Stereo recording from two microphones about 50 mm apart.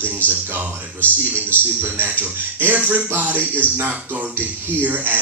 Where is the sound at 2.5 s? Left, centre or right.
Right.